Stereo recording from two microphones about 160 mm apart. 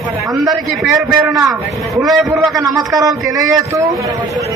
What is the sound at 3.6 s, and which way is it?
Speech, 20° right (ahead or behind).